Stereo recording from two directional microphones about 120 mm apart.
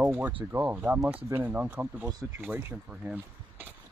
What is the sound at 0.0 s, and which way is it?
Speech, 15° right (ahead or behind).